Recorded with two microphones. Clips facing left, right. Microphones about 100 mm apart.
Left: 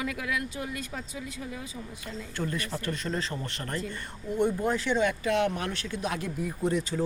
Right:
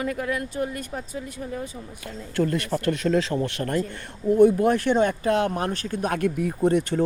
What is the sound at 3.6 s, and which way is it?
Speech, 55° right (ahead or behind).